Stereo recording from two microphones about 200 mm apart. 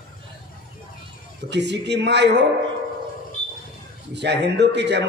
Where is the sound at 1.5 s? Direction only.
60° right (ahead or behind).